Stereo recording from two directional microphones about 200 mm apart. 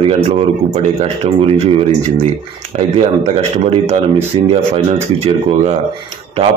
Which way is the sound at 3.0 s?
35° right (ahead or behind).